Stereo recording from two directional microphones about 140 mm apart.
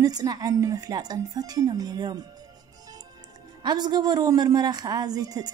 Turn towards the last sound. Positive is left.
turn(degrees=-25)  # may be behind; listen again after turning